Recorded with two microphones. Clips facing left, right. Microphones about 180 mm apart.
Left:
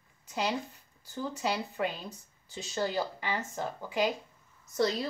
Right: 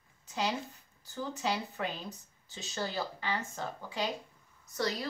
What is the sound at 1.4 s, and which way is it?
A woman's voice, 10° left (ahead or behind).